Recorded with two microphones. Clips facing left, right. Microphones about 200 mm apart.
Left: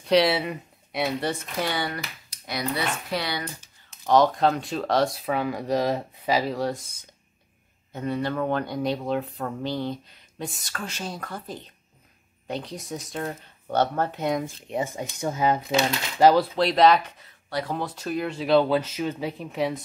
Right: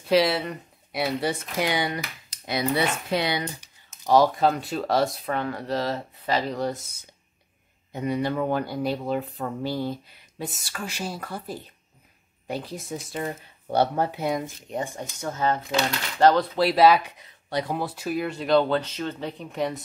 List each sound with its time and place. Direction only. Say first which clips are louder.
0.0 s a woman's voice: left 1 dB; centre (ahead or behind)
1.6 s speech: right 3 dB; 15° right (ahead or behind)
7.9 s speech: right 1 dB; 15° right (ahead or behind)
15.0 s speech: left 3 dB; 10° left (ahead or behind)
16.5 s speech: right 1 dB; 5° right (ahead or behind)
17.5 s speech: right 1 dB; 20° right (ahead or behind)
17.7 s speech: right 1 dB; 10° right (ahead or behind)